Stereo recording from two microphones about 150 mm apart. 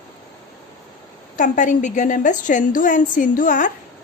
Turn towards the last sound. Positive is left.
turn(degrees=60)  # may be behind; listen again after turning